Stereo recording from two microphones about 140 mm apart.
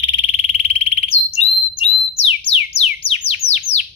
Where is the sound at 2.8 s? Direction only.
45° left (ahead or behind).